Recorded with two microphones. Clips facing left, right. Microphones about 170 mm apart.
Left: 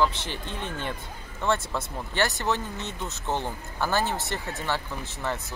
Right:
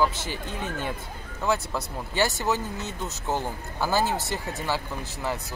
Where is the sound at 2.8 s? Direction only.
40° right (ahead or behind).